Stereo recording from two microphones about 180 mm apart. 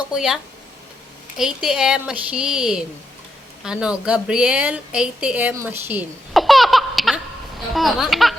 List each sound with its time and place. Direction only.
0.1 s a woman's voice: centre (ahead or behind)
1.4 s a woman's voice: 5° right (ahead or behind)